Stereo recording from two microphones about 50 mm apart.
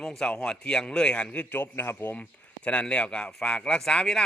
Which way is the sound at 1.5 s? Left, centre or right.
Left.